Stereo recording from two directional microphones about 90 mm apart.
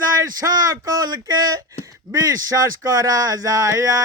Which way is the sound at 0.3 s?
40° right (ahead or behind).